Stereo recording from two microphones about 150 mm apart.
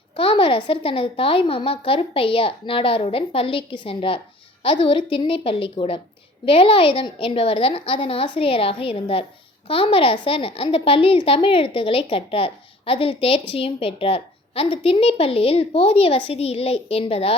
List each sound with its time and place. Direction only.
0.2 s speech: 35° left (ahead or behind)